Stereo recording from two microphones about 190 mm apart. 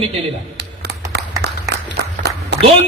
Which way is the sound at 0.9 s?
60° right (ahead or behind).